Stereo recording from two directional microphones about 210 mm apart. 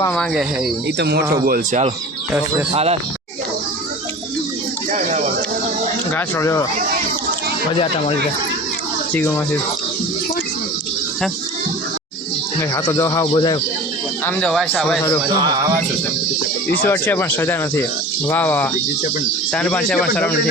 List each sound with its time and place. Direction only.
0.1 s speech: centre (ahead or behind)
0.9 s speech: 50° right (ahead or behind)
2.7 s speech: 30° right (ahead or behind)
4.9 s a sound: 35° right (ahead or behind)
6.1 s speech: 15° left (ahead or behind)
9.1 s speech: 10° left (ahead or behind)
12.9 s speech: 15° left (ahead or behind)
14.3 s speech: 5° left (ahead or behind)
16.8 s speech: 10° left (ahead or behind)